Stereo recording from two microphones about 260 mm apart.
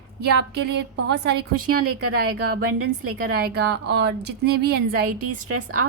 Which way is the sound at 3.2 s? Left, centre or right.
Right.